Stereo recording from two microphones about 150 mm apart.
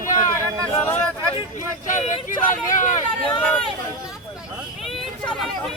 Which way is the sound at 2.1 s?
60° left (ahead or behind).